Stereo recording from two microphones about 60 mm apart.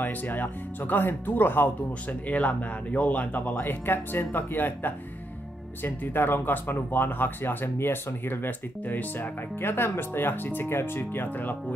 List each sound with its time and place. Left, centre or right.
0.0 s speech: left
2.2 s speech: left